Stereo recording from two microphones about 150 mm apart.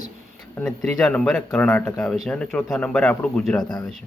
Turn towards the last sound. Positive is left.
turn(degrees=25)  # may be behind; listen again after turning